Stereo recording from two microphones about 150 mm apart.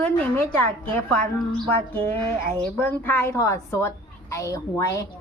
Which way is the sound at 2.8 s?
15° left (ahead or behind).